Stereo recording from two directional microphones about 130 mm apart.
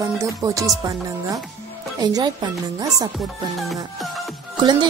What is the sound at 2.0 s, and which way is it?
Speech, 30° right (ahead or behind).